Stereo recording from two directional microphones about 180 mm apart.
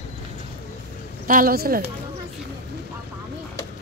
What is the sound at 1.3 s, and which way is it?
Speech, 50° right (ahead or behind).